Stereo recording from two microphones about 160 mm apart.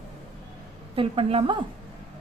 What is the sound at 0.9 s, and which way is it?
Speech, 35° right (ahead or behind).